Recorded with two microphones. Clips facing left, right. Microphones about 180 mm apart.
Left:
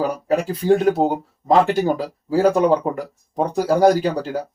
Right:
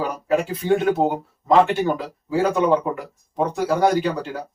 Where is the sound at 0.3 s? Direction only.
40° left (ahead or behind).